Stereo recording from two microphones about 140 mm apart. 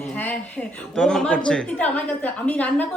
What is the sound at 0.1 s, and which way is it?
A woman's voice, 10° left (ahead or behind).